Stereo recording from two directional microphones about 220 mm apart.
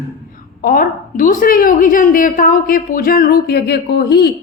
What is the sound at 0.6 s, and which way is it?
A woman's voice, 40° left (ahead or behind).